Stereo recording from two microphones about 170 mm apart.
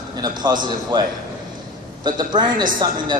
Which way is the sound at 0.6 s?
25° right (ahead or behind).